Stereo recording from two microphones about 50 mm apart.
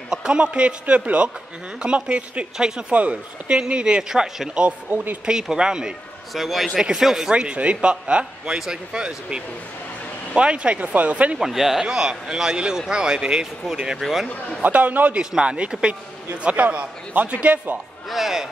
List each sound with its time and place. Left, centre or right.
0.1 s speech: centre
2.5 s a man's voice: centre
2.9 s a man's voice: right; by 4.5 s centre
4.9 s speech: right
5.2 s a man's voice: centre
6.3 s a man's voice: centre
7.3 s a man's voice: right
11.3 s a man's voice: centre
14.6 s speech: right
18.1 s a man's voice: centre